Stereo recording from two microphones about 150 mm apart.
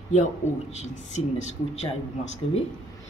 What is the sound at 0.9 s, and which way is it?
Speech, 55° left (ahead or behind).